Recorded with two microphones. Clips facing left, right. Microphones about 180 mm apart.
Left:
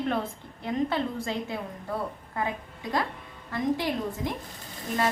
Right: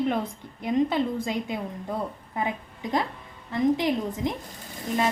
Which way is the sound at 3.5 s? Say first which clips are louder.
Right 4 dB; 20° right (ahead or behind).